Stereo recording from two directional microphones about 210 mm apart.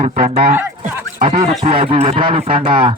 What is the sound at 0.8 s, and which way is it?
Music, 35° right (ahead or behind).